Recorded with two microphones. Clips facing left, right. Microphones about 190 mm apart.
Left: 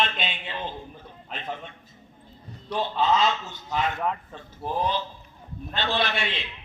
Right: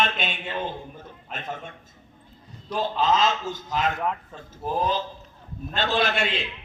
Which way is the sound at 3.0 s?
90° right.